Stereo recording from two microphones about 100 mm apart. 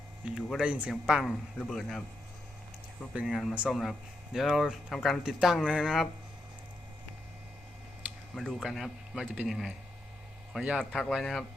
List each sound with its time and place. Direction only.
0.6 s a man's voice: 10° right (ahead or behind); by 2.0 s 5° left (ahead or behind)
3.2 s a man's voice: 5° right (ahead or behind)
8.4 s a man's voice: 5° left (ahead or behind); by 10.8 s 10° right (ahead or behind)
10.9 s a man's voice: centre (ahead or behind)